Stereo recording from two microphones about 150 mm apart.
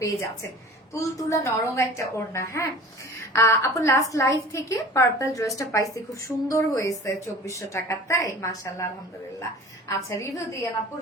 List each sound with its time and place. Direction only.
0.9 s a woman's voice: 20° left (ahead or behind)
9.9 s a woman's voice: 20° left (ahead or behind)